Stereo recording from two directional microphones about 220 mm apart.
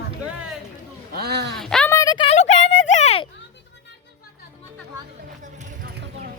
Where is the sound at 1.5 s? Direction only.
Centre (ahead or behind); by 3.2 s 30° left (ahead or behind).